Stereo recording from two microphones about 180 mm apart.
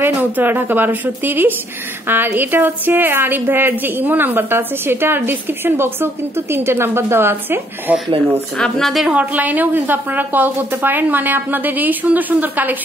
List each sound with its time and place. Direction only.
0.0 s a woman's voice: 10° right (ahead or behind)
8.5 s a woman's voice: 5° left (ahead or behind)